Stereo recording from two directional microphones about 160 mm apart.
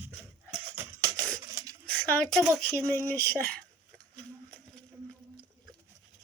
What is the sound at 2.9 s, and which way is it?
Speech, 10° left (ahead or behind).